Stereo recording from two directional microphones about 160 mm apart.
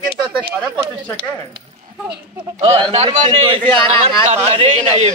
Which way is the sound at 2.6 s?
40° right (ahead or behind).